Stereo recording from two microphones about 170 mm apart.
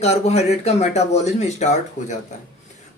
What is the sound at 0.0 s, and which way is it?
Speech, 40° left (ahead or behind).